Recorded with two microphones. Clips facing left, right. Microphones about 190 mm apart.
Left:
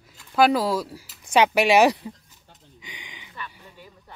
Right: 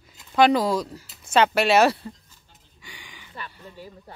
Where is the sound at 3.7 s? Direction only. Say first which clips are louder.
Right 6 dB; 35° right (ahead or behind).